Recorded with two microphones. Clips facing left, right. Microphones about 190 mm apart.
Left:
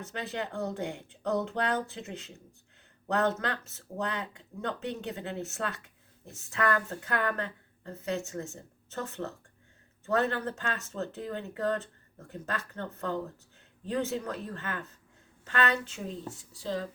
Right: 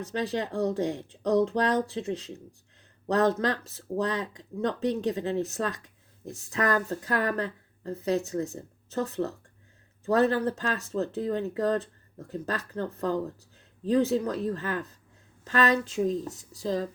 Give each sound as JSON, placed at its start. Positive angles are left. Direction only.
{"t": 0.0, "sound": "a woman's voice", "side_deg": -35}